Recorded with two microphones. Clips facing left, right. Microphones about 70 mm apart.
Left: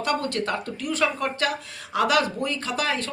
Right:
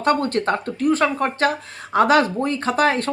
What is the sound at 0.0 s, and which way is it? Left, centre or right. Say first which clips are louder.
Speech: right 6 dB; right.